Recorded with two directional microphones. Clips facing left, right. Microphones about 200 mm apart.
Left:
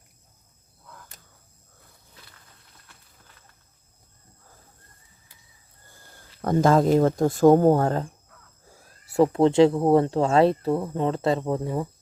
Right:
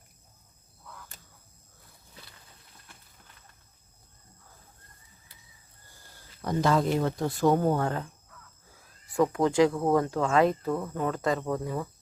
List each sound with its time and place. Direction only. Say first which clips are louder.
6.4 s speech: left 6 dB; 50° left (ahead or behind)
8.7 s a sound: left 6 dB; 40° left (ahead or behind)
9.3 s speech: left 6 dB; 25° left (ahead or behind)